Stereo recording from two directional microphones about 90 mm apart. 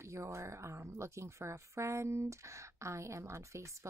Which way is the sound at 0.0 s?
30° right (ahead or behind).